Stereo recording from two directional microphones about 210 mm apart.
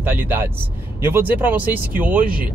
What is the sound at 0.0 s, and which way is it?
Speech, 10° right (ahead or behind).